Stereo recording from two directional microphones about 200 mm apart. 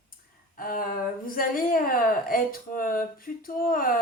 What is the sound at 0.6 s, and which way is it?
Speech, 45° left (ahead or behind).